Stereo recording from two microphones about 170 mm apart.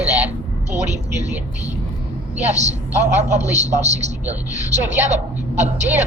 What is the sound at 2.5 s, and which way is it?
A woman's voice, 40° right (ahead or behind).